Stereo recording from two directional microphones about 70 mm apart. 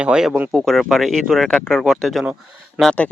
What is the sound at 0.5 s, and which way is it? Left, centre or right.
Speech, centre.